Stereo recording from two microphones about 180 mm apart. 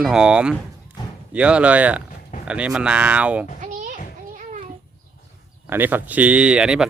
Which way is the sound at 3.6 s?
45° right (ahead or behind).